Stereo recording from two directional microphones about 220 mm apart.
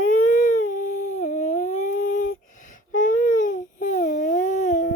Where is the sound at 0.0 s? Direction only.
35° left (ahead or behind).